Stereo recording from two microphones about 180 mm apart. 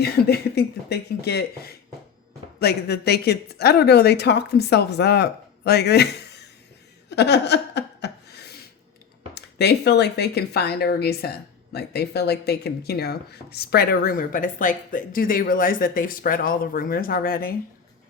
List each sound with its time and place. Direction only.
0.0 s speech: 65° left (ahead or behind)
7.1 s a sound: 70° left (ahead or behind)
9.3 s speech: 65° left (ahead or behind)